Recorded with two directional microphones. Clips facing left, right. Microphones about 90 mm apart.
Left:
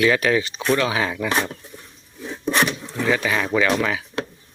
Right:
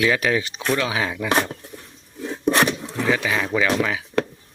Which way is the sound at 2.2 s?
40° right (ahead or behind).